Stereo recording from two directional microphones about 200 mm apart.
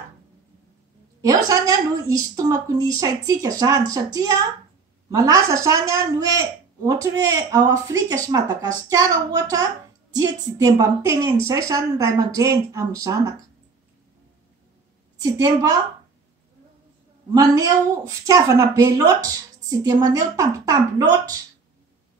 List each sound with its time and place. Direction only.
1.2 s a woman's voice: 15° right (ahead or behind)
15.3 s a woman's voice: 20° right (ahead or behind)
17.3 s a woman's voice: 15° right (ahead or behind)